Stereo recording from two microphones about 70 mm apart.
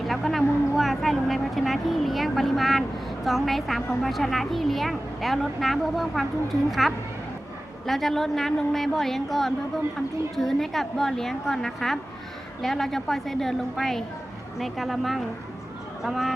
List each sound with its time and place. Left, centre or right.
0.0 s vehicle: centre
3.2 s a woman's voice: centre